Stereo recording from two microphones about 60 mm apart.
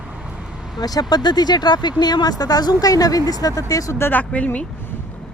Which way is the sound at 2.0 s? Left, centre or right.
Left.